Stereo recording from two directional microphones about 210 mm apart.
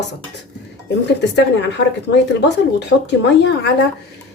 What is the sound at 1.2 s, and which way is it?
A woman's voice, 55° left (ahead or behind).